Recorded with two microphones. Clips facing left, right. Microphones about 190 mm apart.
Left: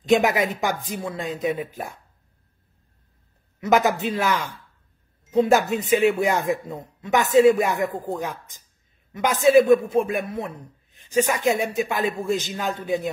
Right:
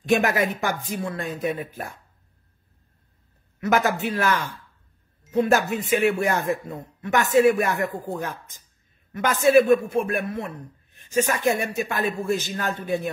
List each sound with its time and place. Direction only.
0.1 s speech: 15° left (ahead or behind)
3.6 s speech: 20° left (ahead or behind)